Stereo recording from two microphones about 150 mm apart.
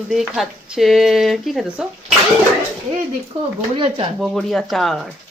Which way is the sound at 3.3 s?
40° right (ahead or behind).